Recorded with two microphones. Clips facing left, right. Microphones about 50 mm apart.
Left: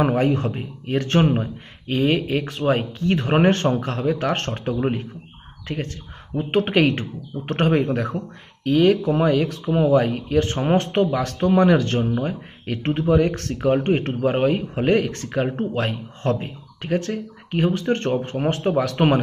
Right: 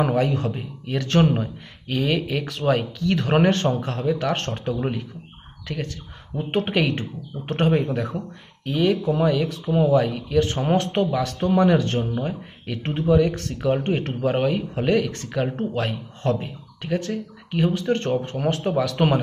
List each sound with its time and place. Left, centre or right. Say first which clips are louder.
0.0 s a man's voice: left 2 dB; left
3.4 s a man's voice: left 2 dB; left
13.8 s a man's voice: left 3 dB; left